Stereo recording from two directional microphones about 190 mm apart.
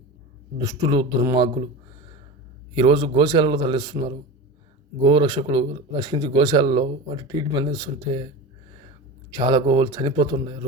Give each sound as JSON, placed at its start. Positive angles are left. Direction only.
{"t": 0.6, "sound": "speech", "side_deg": -20}
{"t": 2.7, "sound": "speech", "side_deg": -25}
{"t": 5.0, "sound": "speech", "side_deg": -25}
{"t": 9.3, "sound": "speech", "side_deg": -20}